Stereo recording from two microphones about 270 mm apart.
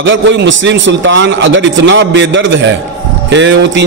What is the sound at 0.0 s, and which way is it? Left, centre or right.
A man's voice, right.